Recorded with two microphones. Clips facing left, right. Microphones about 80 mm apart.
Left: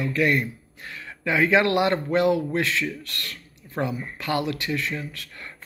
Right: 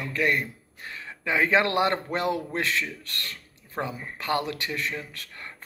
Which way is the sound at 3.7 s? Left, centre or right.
Right.